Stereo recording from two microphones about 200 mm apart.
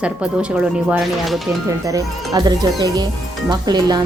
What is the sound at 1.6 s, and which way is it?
Speech, 15° right (ahead or behind).